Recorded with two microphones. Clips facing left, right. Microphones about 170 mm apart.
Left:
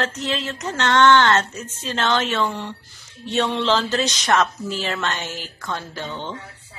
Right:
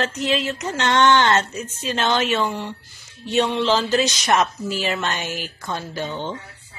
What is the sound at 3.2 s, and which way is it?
Speech, 10° right (ahead or behind).